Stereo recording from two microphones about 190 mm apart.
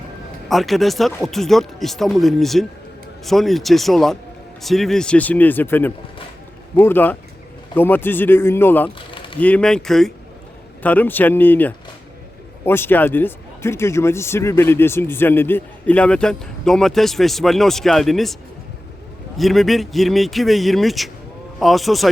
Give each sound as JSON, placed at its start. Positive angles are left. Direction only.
{"t": 0.4, "sound": "speech", "side_deg": 0}
{"t": 9.1, "sound": "a sound", "side_deg": 25}
{"t": 9.4, "sound": "speech", "side_deg": 5}
{"t": 19.4, "sound": "speech", "side_deg": 0}